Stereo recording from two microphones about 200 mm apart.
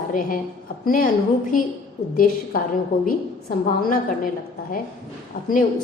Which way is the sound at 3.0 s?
45° left (ahead or behind).